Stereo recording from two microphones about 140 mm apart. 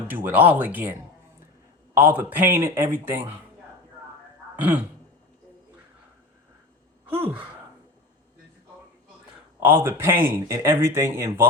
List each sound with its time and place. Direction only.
0.1 s speech: 15° right (ahead or behind)
2.0 s speech: 15° right (ahead or behind)
7.1 s speech: 15° right (ahead or behind)
9.6 s speech: 15° right (ahead or behind)